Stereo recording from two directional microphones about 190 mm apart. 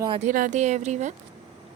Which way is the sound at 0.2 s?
40° right (ahead or behind).